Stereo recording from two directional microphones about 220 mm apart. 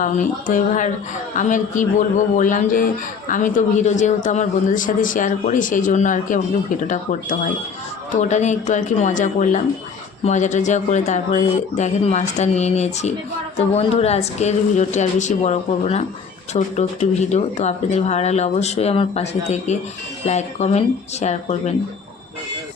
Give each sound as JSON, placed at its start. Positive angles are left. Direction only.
{"t": 0.0, "sound": "a man's voice", "side_deg": 35}